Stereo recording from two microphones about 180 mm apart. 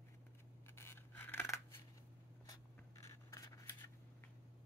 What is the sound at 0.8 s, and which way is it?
Scissors, 15° left (ahead or behind).